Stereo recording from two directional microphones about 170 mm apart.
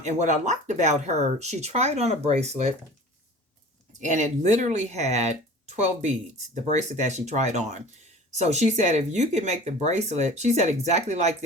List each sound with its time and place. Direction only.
0.0 s speech: 45° right (ahead or behind)
4.0 s speech: 45° right (ahead or behind)